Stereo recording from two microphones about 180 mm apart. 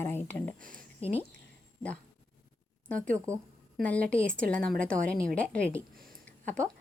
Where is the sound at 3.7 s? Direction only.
5° left (ahead or behind).